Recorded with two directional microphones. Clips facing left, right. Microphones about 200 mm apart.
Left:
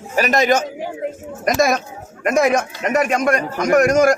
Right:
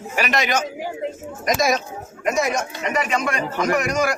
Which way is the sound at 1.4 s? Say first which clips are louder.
Left 3 dB; 55° left (ahead or behind).